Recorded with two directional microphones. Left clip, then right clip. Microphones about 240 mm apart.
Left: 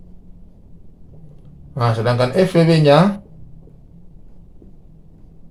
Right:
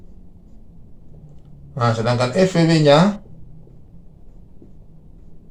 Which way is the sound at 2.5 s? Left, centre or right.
Left.